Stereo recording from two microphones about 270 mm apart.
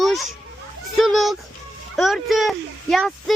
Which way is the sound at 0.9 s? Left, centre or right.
Centre.